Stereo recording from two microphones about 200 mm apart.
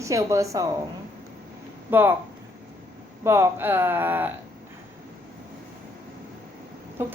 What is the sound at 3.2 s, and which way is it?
A woman's voice, 15° right (ahead or behind).